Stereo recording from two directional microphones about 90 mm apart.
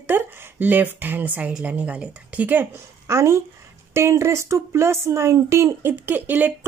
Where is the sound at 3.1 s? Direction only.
30° right (ahead or behind).